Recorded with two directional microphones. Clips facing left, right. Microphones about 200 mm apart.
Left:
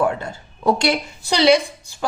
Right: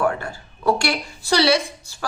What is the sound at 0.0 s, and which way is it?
A woman's voice, 20° left (ahead or behind).